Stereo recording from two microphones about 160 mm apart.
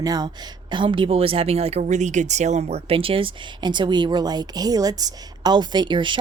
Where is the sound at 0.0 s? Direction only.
25° right (ahead or behind).